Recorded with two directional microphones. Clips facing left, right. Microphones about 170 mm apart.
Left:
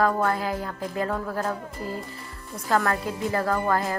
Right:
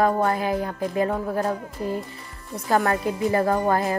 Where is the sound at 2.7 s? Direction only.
20° right (ahead or behind).